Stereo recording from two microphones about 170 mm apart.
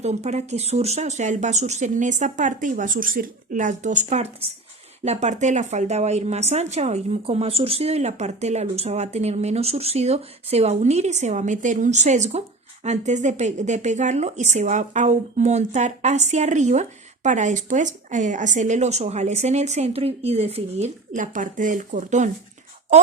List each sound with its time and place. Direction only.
0.0 s a woman's voice: 40° right (ahead or behind)